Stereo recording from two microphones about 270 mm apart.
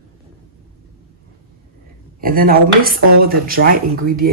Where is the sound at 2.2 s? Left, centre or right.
Right.